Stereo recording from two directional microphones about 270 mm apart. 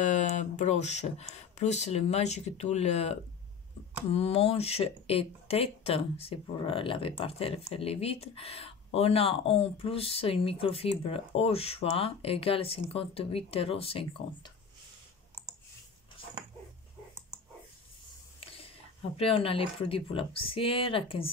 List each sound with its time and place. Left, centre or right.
0.0 s speech: left
19.1 s speech: left